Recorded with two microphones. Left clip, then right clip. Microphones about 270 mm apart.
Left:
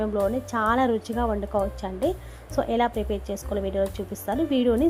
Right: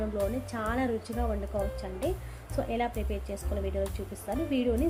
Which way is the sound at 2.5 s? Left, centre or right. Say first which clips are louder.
Left 8 dB; centre.